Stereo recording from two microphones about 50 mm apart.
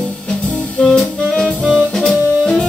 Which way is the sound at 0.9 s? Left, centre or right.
Centre.